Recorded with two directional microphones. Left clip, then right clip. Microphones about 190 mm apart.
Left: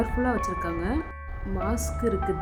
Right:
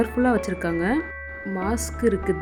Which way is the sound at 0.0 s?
25° right (ahead or behind).